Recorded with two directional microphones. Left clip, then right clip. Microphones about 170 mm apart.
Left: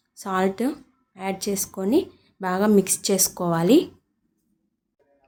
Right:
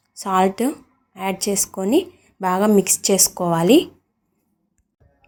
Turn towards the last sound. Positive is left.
turn(degrees=-5)  # may be behind; listen again after turning